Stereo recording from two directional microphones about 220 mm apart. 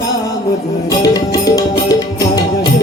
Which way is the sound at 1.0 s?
15° left (ahead or behind).